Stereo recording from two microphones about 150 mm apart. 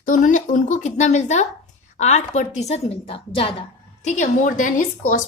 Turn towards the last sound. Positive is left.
turn(degrees=60)  # may be behind; listen again after turning